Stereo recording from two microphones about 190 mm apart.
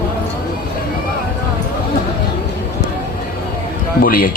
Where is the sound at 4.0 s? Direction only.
50° left (ahead or behind).